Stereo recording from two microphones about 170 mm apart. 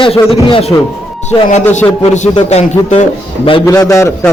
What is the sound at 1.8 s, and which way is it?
Speech, 15° left (ahead or behind).